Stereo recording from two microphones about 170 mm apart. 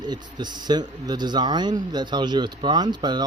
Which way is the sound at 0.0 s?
25° right (ahead or behind).